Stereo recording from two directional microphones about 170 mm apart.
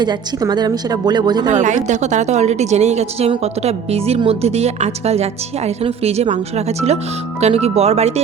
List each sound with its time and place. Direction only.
0.0 s speech: 25° right (ahead or behind)
1.5 s a woman's voice: 45° right (ahead or behind)